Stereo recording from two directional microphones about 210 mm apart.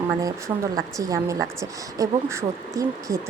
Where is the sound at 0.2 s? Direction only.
15° right (ahead or behind).